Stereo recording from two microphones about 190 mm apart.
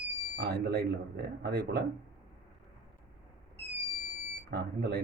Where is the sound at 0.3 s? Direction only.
60° right (ahead or behind).